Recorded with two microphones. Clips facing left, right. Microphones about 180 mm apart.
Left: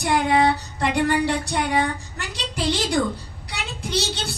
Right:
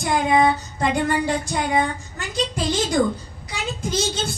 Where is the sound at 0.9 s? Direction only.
70° left (ahead or behind).